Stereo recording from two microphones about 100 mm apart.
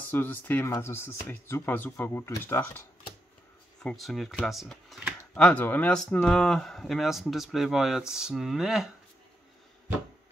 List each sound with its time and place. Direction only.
0.1 s speech: 20° left (ahead or behind)
3.8 s speech: centre (ahead or behind)
5.3 s speech: 15° left (ahead or behind); by 8.9 s 5° right (ahead or behind)